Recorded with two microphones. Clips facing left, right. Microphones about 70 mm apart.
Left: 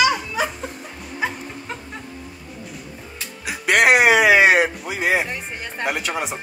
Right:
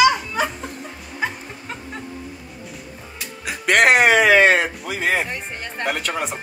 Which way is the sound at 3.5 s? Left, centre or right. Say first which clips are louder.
Even; centre.